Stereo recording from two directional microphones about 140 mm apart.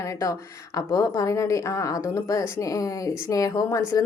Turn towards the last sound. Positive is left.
turn(degrees=25)  # may be behind; listen again after turning